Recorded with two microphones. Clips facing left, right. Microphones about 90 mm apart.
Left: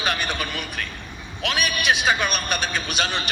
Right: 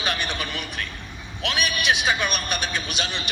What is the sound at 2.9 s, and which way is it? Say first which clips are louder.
Speech: left 4 dB; 50° left (ahead or behind).